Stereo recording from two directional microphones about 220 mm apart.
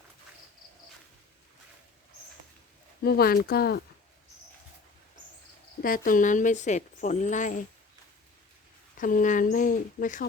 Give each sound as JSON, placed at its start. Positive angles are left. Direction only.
{"t": 3.0, "sound": "speech", "side_deg": 45}
{"t": 5.8, "sound": "a woman's voice", "side_deg": 40}
{"t": 9.0, "sound": "a woman's voice", "side_deg": 35}